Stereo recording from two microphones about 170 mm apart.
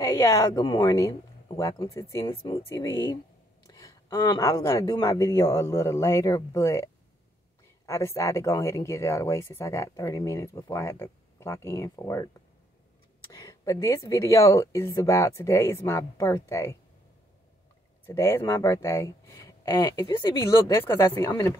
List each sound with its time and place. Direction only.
0.0 s speech: 20° left (ahead or behind)
13.3 s speech: 20° left (ahead or behind)
18.0 s speech: 15° left (ahead or behind)